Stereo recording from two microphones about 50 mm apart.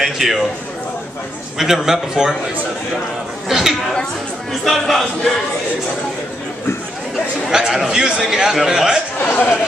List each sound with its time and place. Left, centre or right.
0.0 s a man's voice: centre
1.6 s a man's voice: centre
3.4 s a man's voice: centre
7.5 s a man's voice: centre
9.2 s speech: left